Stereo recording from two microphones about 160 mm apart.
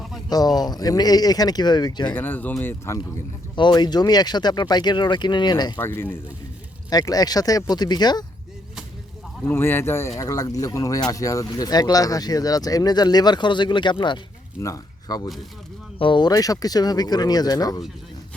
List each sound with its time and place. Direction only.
0.3 s speech: 25° left (ahead or behind)
2.1 s speech: 10° left (ahead or behind)
3.5 s speech: 30° left (ahead or behind)
5.8 s speech: 15° left (ahead or behind)
6.9 s speech: 25° left (ahead or behind)
9.4 s speech: 15° left (ahead or behind)